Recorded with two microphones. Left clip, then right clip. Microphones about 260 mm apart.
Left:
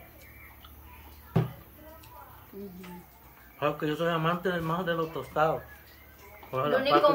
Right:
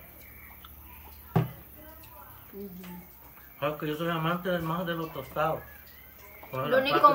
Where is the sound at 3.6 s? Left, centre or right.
Left.